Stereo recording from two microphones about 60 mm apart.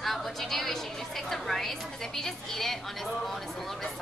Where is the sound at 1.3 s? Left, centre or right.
Centre.